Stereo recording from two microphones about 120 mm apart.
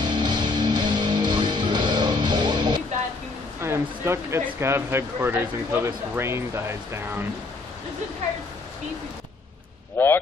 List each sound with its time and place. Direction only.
0.0 s music: 35° right (ahead or behind)
3.6 s speech: 20° right (ahead or behind)
9.9 s speech: 20° left (ahead or behind)